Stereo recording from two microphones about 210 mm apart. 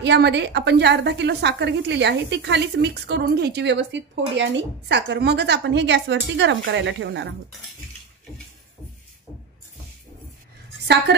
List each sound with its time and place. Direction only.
0.0 s a woman's voice: 55° right (ahead or behind)